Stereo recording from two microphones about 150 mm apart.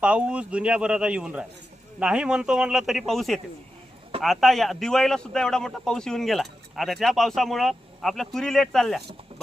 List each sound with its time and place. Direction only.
0.0 s speech: 10° right (ahead or behind)